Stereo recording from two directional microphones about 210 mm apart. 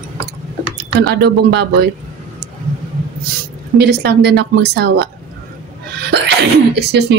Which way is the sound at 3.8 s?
50° right (ahead or behind).